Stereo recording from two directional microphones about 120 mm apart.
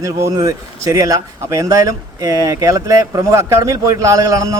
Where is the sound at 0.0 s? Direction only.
25° right (ahead or behind).